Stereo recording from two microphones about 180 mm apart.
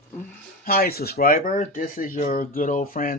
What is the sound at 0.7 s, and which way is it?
Speech, 55° left (ahead or behind).